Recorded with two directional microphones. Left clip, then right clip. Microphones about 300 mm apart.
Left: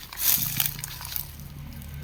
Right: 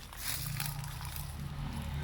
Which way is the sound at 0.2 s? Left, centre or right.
Left.